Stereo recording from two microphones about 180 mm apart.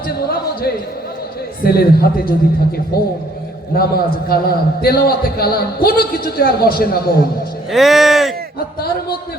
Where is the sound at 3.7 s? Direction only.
60° left (ahead or behind).